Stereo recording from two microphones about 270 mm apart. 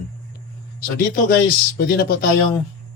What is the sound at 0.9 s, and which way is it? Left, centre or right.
Speech, left.